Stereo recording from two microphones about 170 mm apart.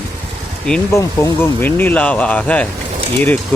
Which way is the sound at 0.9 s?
15° left (ahead or behind).